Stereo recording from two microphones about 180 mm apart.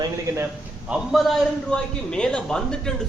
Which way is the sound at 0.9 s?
Centre (ahead or behind).